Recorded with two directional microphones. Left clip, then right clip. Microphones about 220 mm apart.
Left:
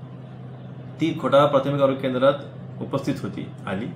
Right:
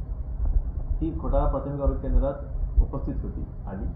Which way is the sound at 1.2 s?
35° left (ahead or behind).